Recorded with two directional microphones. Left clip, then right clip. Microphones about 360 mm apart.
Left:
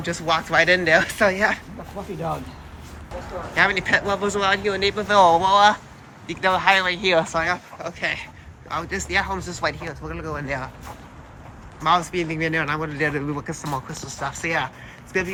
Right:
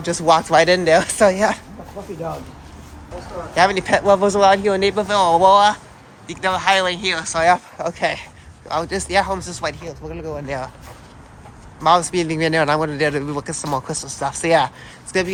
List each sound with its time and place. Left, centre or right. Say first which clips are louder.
0.0 s speech: right 7 dB; centre
3.5 s speech: right 3 dB; centre
5.0 s speech: right 1 dB; centre
7.4 s speech: right 9 dB; centre
11.8 s speech: right 5 dB; centre